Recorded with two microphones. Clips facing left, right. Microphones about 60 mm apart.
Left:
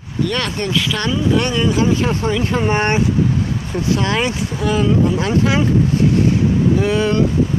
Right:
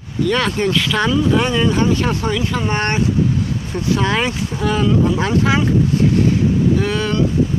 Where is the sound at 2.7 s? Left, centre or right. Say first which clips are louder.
Left 3 dB; centre.